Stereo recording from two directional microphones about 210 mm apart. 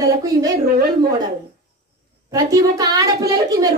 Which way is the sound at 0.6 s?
45° right (ahead or behind).